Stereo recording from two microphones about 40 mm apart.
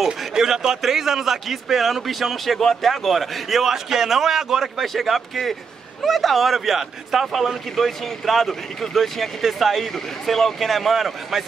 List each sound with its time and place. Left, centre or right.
0.4 s a man's voice: centre
4.7 s a man's voice: centre